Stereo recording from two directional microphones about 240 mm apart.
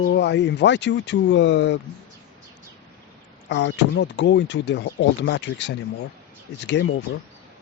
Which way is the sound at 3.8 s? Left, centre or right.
Left.